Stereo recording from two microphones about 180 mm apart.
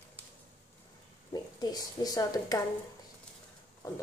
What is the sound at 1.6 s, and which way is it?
Speech, 20° left (ahead or behind).